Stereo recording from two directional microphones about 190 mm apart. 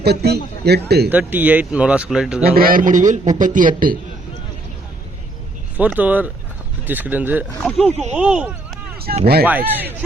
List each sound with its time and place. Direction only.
0.0 s a man's voice: 55° right (ahead or behind)
1.1 s speech: 10° right (ahead or behind)
2.4 s a man's voice: 50° right (ahead or behind)
5.7 s speech: 10° right (ahead or behind)
9.1 s a man's voice: 50° right (ahead or behind)
9.5 s speech: 10° right (ahead or behind)